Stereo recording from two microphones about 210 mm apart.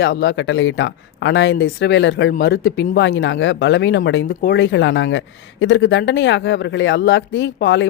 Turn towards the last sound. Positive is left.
turn(degrees=60)  # may be behind; listen again after turning